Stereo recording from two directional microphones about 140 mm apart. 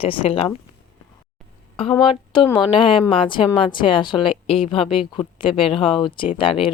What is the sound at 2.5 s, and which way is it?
A woman's voice, 35° left (ahead or behind).